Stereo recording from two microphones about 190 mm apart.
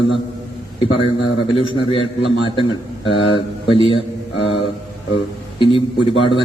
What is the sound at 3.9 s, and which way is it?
Mantra, 30° left (ahead or behind).